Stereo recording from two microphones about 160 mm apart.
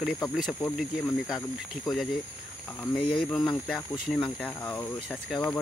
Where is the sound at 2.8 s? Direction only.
5° left (ahead or behind).